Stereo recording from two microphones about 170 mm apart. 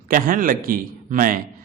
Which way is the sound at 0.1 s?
55° right (ahead or behind).